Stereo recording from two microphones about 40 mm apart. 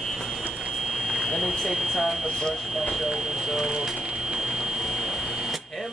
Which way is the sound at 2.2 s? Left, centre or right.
Left.